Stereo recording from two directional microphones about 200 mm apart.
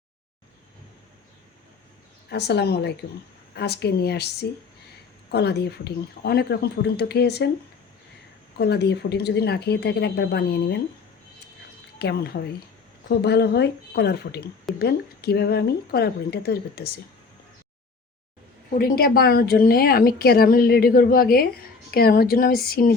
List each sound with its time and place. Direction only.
2.3 s a woman's voice: 55° left (ahead or behind)
8.5 s speech: 55° left (ahead or behind)
11.9 s a woman's voice: 50° left (ahead or behind)
18.7 s a woman's voice: 45° left (ahead or behind)